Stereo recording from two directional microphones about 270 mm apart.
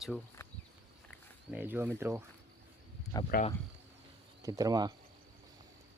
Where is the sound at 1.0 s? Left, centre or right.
Centre.